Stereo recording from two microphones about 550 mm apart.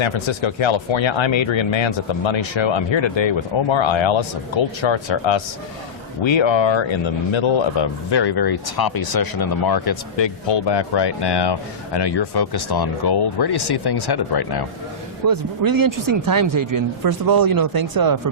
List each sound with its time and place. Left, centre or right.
0.0 s speech: left
15.3 s speech: right